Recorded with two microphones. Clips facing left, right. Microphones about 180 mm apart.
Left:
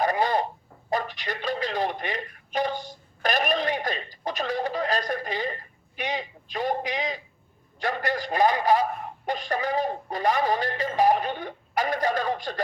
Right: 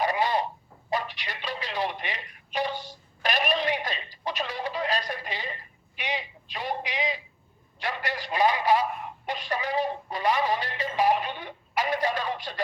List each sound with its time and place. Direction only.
0.0 s radio: 45° left (ahead or behind)
0.9 s a man's voice: 45° left (ahead or behind)